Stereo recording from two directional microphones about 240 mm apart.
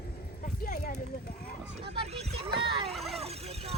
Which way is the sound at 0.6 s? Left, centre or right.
Left.